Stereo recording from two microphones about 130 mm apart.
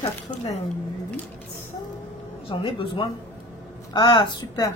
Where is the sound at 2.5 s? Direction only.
40° left (ahead or behind).